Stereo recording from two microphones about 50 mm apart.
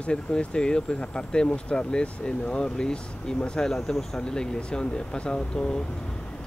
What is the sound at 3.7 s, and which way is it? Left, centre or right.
Speech, centre.